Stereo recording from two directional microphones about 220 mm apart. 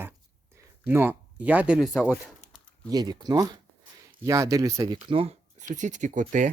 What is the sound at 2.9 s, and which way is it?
Speech, 20° right (ahead or behind).